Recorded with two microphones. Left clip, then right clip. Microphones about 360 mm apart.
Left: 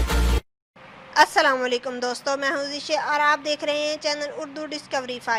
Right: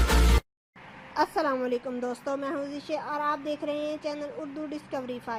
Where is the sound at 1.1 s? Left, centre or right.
Left.